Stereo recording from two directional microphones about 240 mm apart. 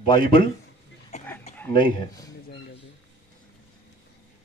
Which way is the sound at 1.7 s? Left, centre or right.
Centre.